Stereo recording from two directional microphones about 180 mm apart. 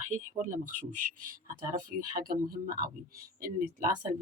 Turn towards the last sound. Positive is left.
turn(degrees=-50)  # may be behind; listen again after turning